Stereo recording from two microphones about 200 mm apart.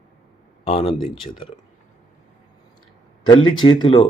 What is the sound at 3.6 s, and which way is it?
Speech, 20° left (ahead or behind).